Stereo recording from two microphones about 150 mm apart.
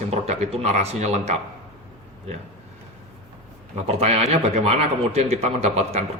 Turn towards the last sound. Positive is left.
turn(degrees=-45)  # may be behind; listen again after turning